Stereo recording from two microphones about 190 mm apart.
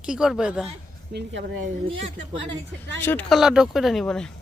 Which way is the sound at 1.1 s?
70° right (ahead or behind).